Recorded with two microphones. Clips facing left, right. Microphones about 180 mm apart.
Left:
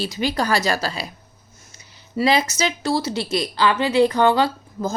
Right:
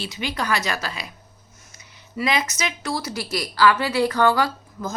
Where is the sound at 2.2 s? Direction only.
30° left (ahead or behind).